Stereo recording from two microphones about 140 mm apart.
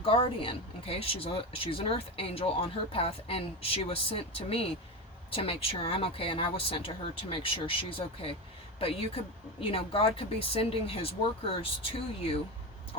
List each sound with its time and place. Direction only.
0.0 s speech: 40° left (ahead or behind)